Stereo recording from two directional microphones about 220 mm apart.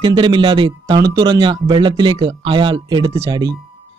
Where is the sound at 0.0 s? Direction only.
20° right (ahead or behind).